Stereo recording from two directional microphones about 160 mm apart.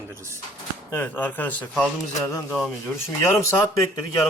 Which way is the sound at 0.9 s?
10° left (ahead or behind).